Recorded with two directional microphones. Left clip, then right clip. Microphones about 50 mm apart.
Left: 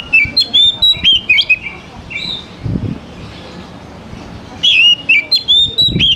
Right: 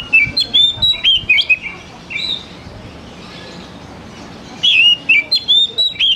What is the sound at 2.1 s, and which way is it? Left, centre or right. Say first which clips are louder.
Bird: right 1 dB; centre.